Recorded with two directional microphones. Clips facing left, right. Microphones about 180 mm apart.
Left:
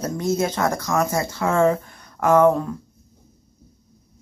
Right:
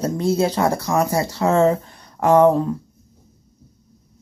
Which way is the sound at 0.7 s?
15° right (ahead or behind).